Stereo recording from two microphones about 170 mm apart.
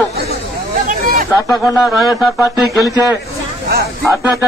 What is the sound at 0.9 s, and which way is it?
Hubbub, 55° right (ahead or behind).